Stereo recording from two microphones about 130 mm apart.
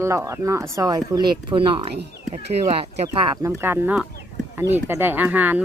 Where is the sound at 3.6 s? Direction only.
15° right (ahead or behind).